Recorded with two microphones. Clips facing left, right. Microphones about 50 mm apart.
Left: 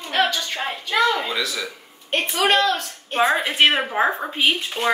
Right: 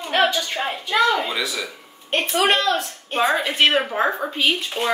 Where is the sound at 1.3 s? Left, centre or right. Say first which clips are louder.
Even; centre.